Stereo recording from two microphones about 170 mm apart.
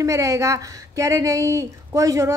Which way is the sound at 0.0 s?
20° right (ahead or behind).